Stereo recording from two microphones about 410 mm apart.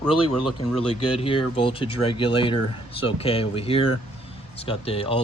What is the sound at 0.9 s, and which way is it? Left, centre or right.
Speech, centre.